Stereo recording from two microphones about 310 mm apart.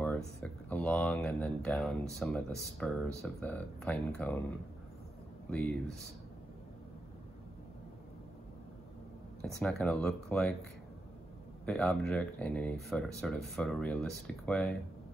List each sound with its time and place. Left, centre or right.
0.0 s speech: centre
5.5 s speech: centre
9.4 s speech: centre
11.6 s speech: centre